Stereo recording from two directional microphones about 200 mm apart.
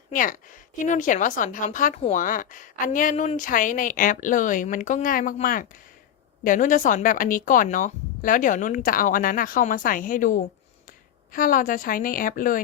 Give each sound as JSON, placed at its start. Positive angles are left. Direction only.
{"t": 0.1, "sound": "a woman's voice", "side_deg": 40}